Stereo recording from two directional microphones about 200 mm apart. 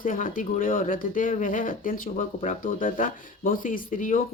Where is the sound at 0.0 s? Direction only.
40° left (ahead or behind).